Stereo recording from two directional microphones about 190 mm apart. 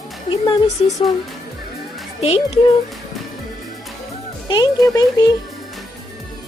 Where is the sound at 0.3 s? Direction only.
30° left (ahead or behind).